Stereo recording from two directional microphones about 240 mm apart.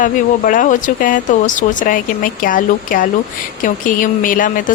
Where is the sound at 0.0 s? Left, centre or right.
Left.